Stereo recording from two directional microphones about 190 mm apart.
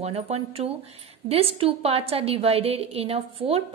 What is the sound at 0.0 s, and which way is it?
A woman's voice, 35° right (ahead or behind).